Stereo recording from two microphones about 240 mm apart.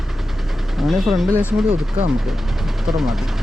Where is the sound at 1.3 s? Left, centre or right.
Centre.